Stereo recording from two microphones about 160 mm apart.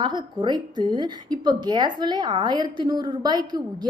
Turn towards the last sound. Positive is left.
turn(degrees=-25)  # may be behind; listen again after turning